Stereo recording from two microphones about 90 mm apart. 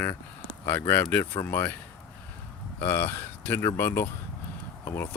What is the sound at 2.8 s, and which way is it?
Speech, 20° left (ahead or behind).